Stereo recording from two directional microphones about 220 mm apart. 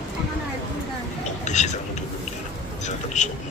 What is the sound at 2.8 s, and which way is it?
Speech, 35° left (ahead or behind).